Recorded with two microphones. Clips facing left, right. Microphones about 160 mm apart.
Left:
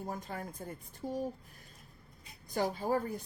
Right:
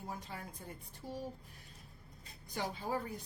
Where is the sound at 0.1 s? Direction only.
50° left (ahead or behind).